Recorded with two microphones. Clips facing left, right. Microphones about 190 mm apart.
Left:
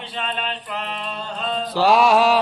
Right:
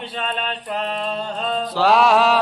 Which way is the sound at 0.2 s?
40° right (ahead or behind).